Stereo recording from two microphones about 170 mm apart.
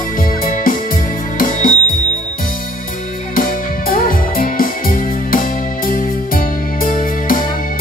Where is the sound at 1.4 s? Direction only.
55° left (ahead or behind).